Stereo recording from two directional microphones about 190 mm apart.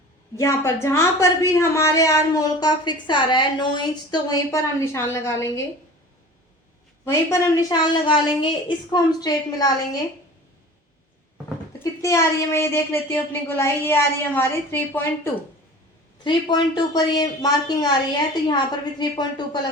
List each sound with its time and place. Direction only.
0.3 s a woman's voice: 15° left (ahead or behind)
7.0 s a woman's voice: 15° left (ahead or behind)
11.8 s a woman's voice: 15° left (ahead or behind)
16.2 s a woman's voice: 25° left (ahead or behind)